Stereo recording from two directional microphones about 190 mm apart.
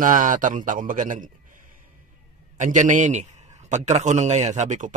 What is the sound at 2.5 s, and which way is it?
A man's voice, 40° right (ahead or behind).